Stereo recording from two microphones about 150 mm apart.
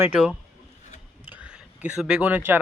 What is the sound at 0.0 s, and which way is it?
Speech, 10° right (ahead or behind).